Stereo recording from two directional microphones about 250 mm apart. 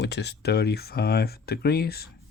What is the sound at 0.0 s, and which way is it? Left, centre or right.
Speech, left.